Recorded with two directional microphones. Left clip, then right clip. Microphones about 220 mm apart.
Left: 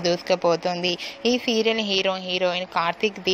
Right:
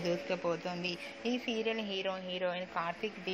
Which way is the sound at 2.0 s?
25° left (ahead or behind).